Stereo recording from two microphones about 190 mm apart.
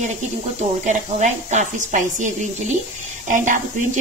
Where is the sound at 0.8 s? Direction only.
40° right (ahead or behind).